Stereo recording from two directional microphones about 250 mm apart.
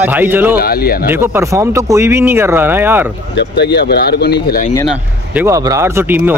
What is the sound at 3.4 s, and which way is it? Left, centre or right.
Speech, left.